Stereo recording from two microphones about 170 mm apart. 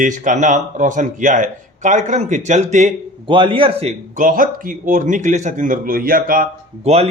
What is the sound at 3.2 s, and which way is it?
Speech, 30° right (ahead or behind).